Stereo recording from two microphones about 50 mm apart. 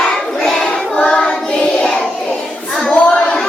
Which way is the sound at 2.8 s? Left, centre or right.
Centre.